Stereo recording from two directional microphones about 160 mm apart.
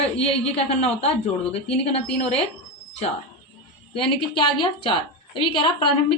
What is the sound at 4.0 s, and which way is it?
A woman's voice, 30° left (ahead or behind).